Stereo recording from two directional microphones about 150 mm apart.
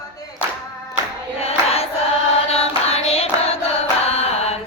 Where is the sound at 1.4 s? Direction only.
45° left (ahead or behind).